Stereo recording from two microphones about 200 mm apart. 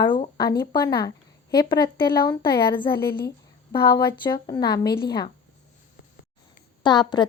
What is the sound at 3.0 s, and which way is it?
Speech, 50° left (ahead or behind).